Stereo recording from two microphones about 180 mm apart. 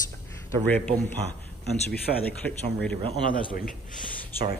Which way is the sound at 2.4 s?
5° left (ahead or behind).